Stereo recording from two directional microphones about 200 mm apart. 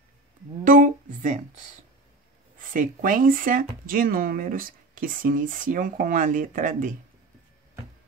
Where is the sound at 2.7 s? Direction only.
40° right (ahead or behind).